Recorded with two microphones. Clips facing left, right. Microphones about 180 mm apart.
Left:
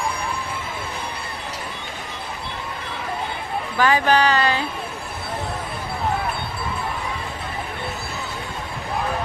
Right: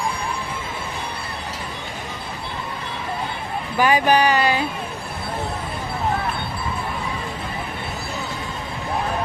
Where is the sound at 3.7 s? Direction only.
15° right (ahead or behind).